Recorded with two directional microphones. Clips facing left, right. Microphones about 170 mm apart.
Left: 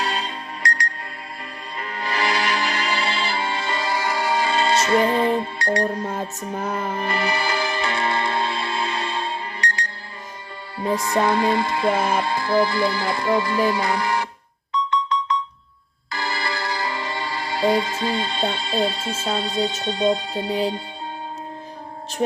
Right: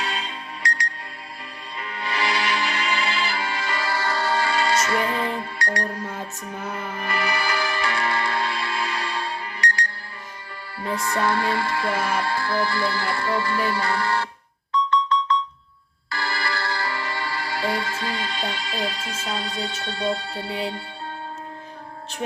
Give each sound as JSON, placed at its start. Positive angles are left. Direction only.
{"t": 0.0, "sound": "music", "side_deg": 40}
{"t": 6.4, "sound": "music", "side_deg": 40}
{"t": 6.9, "sound": "music", "side_deg": 25}